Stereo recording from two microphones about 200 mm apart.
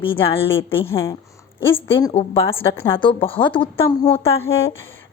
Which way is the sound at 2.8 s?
25° left (ahead or behind).